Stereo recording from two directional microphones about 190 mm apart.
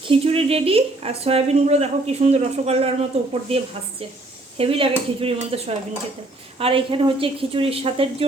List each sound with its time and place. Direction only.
0.1 s a woman's voice: 30° right (ahead or behind)
4.5 s a woman's voice: 30° right (ahead or behind)